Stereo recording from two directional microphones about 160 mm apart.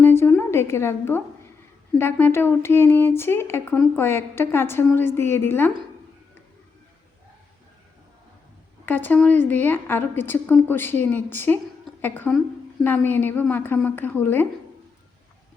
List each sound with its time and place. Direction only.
0.0 s a sound: 15° left (ahead or behind)
2.0 s a woman's voice: 15° left (ahead or behind)
8.9 s a woman's voice: 10° left (ahead or behind)